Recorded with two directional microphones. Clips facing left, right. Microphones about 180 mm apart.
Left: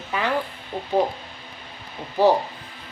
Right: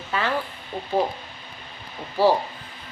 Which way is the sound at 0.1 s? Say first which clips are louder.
Left 1 dB; 15° left (ahead or behind).